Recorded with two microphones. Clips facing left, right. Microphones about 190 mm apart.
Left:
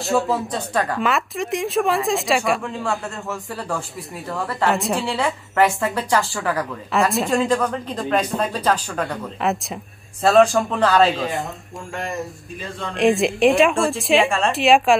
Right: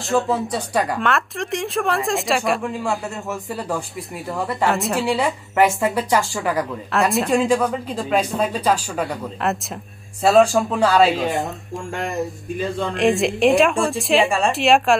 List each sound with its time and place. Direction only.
0.0 s speech: centre (ahead or behind)
2.6 s speech: 15° right (ahead or behind)
4.6 s speech: centre (ahead or behind)
5.0 s speech: 15° right (ahead or behind)
6.9 s speech: centre (ahead or behind)